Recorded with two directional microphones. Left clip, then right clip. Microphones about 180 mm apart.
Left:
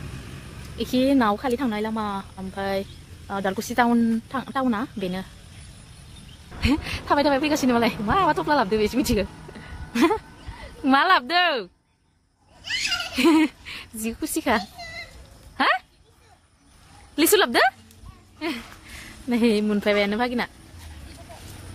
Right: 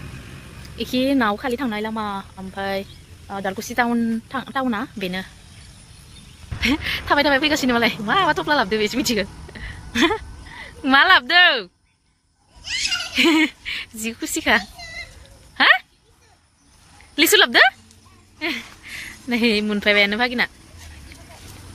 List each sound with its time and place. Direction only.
0.7 s speech: centre (ahead or behind)
3.3 s speech: 20° left (ahead or behind)
4.1 s speech: centre (ahead or behind)
6.6 s a woman's voice: centre (ahead or behind)
13.1 s a sound: 5° left (ahead or behind)
14.3 s speech: 5° left (ahead or behind)
15.5 s a sound: 5° left (ahead or behind)
17.1 s speech: 5° left (ahead or behind)